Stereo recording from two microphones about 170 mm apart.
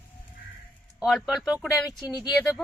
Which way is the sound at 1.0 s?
Centre (ahead or behind).